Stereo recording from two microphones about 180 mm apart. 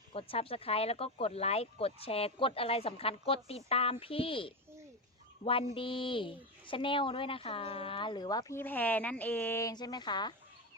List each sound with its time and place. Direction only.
0.1 s a woman's voice: 30° left (ahead or behind)